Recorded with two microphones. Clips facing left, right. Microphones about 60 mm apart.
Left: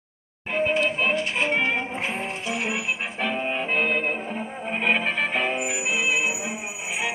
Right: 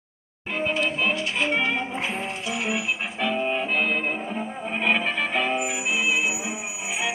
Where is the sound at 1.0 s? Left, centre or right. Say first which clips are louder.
Left 1 dB; left.